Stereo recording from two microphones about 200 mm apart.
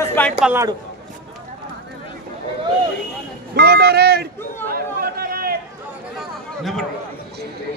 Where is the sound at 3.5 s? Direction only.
55° right (ahead or behind).